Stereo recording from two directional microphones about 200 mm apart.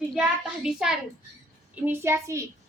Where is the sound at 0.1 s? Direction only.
5° right (ahead or behind).